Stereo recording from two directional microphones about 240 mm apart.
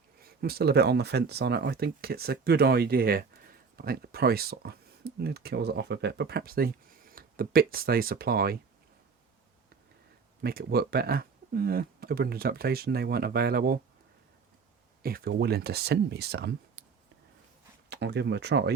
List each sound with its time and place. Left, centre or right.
0.2 s speech: right
10.4 s speech: right
15.0 s speech: right
17.8 s speech: right